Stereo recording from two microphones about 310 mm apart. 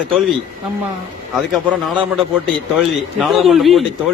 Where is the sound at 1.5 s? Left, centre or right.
Centre.